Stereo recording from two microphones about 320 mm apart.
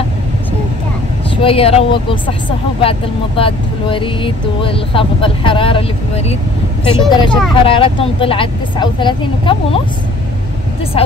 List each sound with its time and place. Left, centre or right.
1.3 s speech: centre